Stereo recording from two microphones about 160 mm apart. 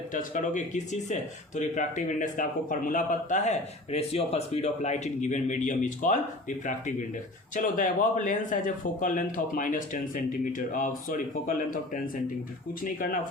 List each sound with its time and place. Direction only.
0.1 s speech: 55° left (ahead or behind)
7.5 s speech: 55° left (ahead or behind)
12.8 s speech: 60° left (ahead or behind)